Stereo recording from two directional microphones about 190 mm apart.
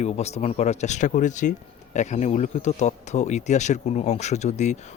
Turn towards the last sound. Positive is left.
turn(degrees=35)  # may be behind; listen again after turning